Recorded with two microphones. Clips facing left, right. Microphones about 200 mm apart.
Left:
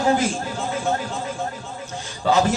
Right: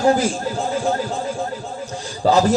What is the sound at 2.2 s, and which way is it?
Speech, 35° right (ahead or behind).